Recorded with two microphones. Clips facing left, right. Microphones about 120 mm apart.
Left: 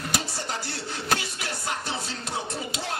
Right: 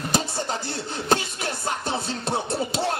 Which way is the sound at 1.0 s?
25° right (ahead or behind).